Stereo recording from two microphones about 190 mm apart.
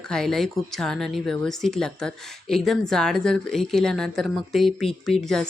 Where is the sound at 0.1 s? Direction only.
Centre (ahead or behind).